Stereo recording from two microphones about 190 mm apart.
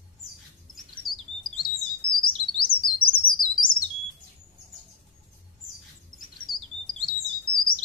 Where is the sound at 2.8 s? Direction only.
50° left (ahead or behind).